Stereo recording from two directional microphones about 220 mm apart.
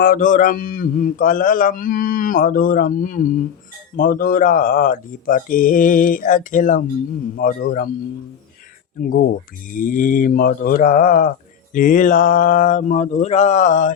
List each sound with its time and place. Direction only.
0.0 s speech: 40° left (ahead or behind)
9.7 s speech: 40° left (ahead or behind)